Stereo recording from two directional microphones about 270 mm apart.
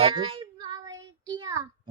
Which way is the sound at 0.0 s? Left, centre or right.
Centre.